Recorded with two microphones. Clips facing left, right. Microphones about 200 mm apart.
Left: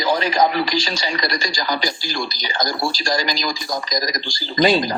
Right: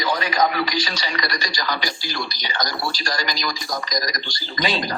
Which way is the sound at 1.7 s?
45° left (ahead or behind).